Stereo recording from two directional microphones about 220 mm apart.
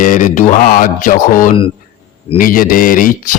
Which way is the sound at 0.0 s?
35° left (ahead or behind).